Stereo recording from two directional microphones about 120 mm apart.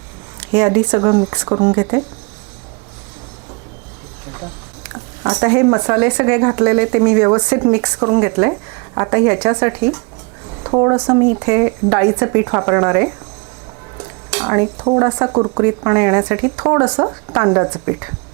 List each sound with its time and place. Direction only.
0.3 s speech: 25° right (ahead or behind)
4.3 s speech: 25° right (ahead or behind)